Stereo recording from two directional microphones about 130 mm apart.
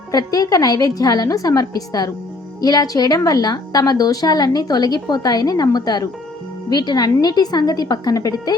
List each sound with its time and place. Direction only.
0.1 s a woman's voice: 30° left (ahead or behind)